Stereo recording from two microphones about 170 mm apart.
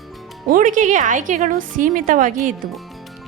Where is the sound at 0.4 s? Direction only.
50° right (ahead or behind).